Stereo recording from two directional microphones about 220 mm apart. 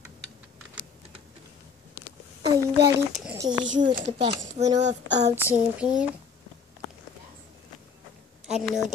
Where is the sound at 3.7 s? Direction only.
35° right (ahead or behind).